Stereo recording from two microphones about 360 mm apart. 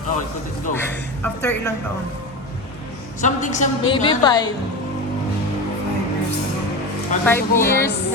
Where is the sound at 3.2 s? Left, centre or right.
Centre.